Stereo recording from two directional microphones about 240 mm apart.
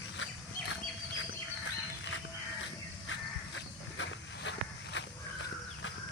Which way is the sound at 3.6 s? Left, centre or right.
Left.